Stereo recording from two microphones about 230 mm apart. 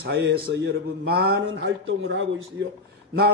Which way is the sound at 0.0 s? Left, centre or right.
Right.